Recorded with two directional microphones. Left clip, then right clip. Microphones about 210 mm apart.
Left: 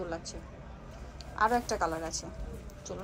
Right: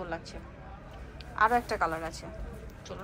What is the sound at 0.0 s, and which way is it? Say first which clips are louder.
A woman's voice: even; 15° left (ahead or behind).